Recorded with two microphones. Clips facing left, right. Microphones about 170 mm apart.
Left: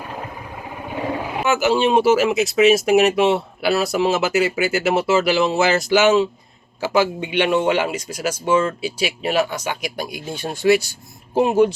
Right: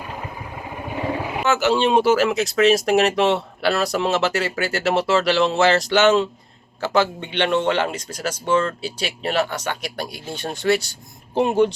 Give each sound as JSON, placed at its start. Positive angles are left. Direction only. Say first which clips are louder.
{"t": 1.5, "sound": "speech", "louder": "left 1 dB", "side_deg": 10}